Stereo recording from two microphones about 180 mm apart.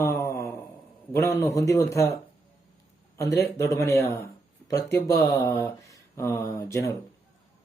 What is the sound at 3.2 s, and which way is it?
Speech, 15° left (ahead or behind).